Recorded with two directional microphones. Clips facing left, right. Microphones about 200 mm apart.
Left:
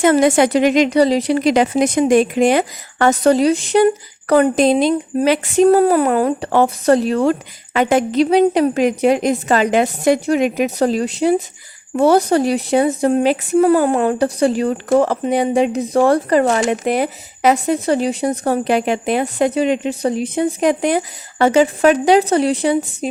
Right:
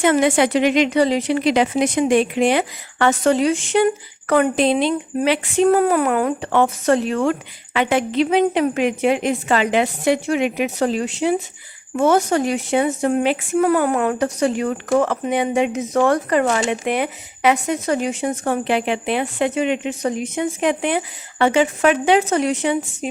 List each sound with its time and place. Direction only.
0.0 s a woman's voice: 40° left (ahead or behind)